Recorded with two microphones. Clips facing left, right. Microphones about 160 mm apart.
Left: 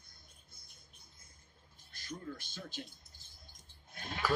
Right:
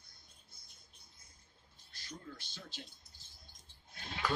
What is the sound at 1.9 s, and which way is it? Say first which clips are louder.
Speech: left 5 dB; 50° left (ahead or behind).